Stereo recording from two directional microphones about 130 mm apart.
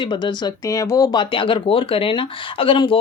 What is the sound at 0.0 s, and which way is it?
Speech, 35° left (ahead or behind).